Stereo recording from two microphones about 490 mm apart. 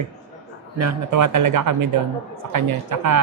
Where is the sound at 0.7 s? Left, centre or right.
Right.